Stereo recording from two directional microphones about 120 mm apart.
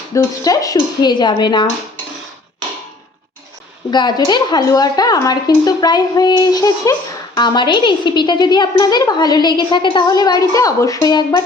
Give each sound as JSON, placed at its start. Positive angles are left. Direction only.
{"t": 0.1, "sound": "a woman's voice", "side_deg": 30}
{"t": 3.9, "sound": "a woman's voice", "side_deg": 35}